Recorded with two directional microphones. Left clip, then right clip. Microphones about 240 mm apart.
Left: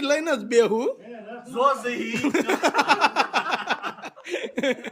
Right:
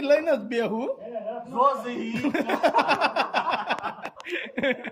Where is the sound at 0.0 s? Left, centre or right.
Centre.